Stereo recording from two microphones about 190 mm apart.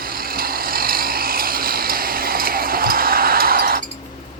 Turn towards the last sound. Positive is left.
turn(degrees=-50)  # may be behind; listen again after turning